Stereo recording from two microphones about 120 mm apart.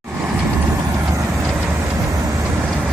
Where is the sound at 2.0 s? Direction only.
30° right (ahead or behind).